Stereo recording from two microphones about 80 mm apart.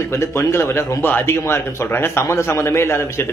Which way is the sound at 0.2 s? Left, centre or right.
Left.